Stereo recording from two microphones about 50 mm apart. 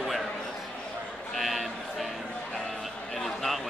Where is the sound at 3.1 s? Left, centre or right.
Centre.